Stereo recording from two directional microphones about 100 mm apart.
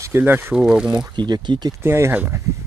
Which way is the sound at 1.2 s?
50° right (ahead or behind).